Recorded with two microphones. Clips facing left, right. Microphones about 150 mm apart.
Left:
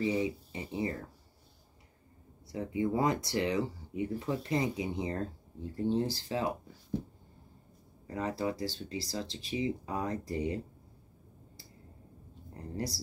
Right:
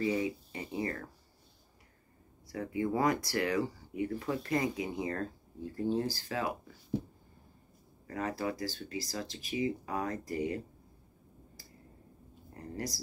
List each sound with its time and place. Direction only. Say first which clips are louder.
0.0 s speech: left 1 dB; 20° left (ahead or behind)
2.4 s speech: left 1 dB; 20° left (ahead or behind)
8.1 s speech: left 1 dB; 30° left (ahead or behind)
12.5 s speech: left 2 dB; 30° left (ahead or behind)